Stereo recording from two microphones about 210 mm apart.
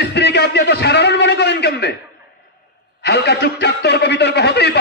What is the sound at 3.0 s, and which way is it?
A man's voice, 55° left (ahead or behind).